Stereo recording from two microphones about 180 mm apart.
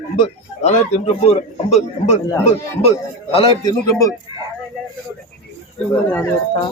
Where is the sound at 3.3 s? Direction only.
25° left (ahead or behind).